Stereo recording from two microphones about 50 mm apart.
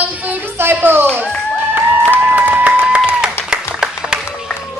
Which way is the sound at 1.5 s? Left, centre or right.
Right.